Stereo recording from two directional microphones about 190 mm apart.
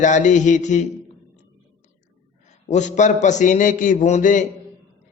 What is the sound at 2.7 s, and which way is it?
A man's voice, 40° left (ahead or behind).